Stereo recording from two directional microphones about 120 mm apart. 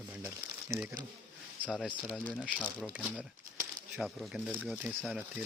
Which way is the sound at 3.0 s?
10° right (ahead or behind).